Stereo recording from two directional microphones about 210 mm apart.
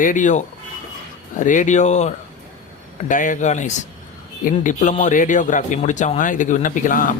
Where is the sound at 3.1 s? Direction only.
40° left (ahead or behind).